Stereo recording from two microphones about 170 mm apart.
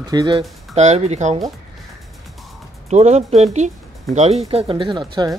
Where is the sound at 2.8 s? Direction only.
40° right (ahead or behind); by 5.3 s 25° right (ahead or behind).